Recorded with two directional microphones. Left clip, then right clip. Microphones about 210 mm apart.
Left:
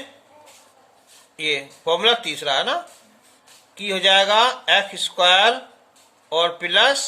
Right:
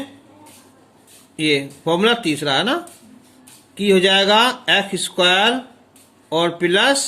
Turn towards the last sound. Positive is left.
turn(degrees=-20)  # may be behind; listen again after turning